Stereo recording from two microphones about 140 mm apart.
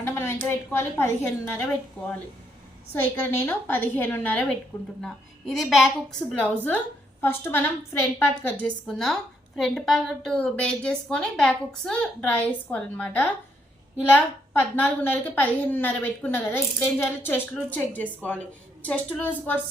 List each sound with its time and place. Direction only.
0.0 s a woman's voice: 20° left (ahead or behind)
2.9 s a woman's voice: 15° left (ahead or behind)
6.7 s a woman's voice: 15° left (ahead or behind)